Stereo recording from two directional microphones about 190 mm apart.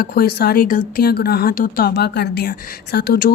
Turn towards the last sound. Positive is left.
turn(degrees=50)  # may be behind; listen again after turning